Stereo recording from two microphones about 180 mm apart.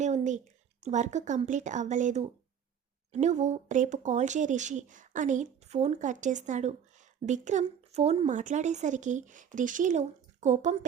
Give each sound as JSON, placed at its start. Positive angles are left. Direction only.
{"t": 0.0, "sound": "a woman's voice", "side_deg": -40}